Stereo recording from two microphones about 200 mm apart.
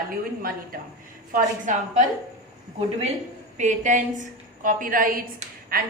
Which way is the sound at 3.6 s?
40° right (ahead or behind).